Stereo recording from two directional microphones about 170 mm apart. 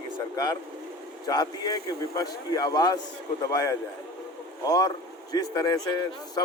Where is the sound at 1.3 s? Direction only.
25° left (ahead or behind).